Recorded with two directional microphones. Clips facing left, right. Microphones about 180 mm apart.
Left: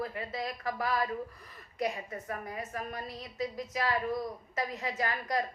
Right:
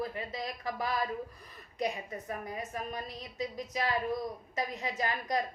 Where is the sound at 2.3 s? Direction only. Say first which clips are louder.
Even; 20° right (ahead or behind).